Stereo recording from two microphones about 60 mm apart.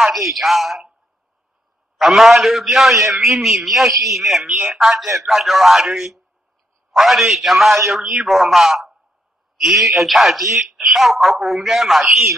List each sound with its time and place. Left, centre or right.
0.0 s speech: centre
2.0 s a man's voice: centre